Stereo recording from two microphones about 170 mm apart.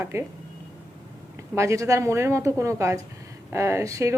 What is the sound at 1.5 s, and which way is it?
A woman's voice, 15° right (ahead or behind).